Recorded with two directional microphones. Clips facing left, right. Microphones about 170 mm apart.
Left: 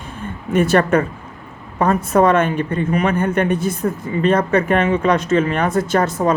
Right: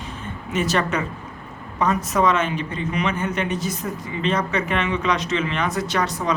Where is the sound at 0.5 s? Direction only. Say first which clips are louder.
Left 8 dB; 55° left (ahead or behind).